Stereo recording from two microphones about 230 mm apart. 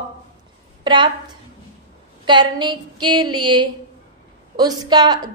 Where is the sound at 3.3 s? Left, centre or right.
Right.